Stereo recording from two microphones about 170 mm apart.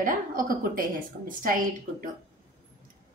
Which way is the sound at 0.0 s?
55° right (ahead or behind).